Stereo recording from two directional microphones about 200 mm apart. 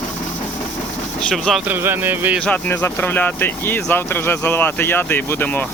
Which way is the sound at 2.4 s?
5° left (ahead or behind).